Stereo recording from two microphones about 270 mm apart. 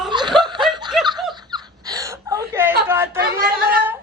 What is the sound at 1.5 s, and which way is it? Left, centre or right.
Whimper, centre.